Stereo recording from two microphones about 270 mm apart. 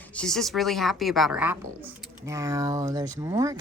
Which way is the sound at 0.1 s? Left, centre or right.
Centre.